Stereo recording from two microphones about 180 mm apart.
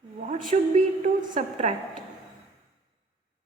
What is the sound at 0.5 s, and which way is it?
A woman's voice, 40° right (ahead or behind).